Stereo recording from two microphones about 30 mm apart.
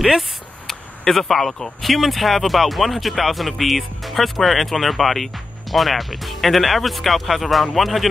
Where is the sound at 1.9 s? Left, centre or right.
Centre.